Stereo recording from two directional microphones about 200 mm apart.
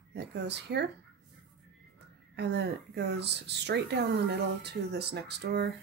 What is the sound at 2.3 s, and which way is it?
Speech, 55° right (ahead or behind).